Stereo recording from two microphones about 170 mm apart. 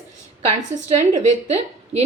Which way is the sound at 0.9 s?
45° right (ahead or behind).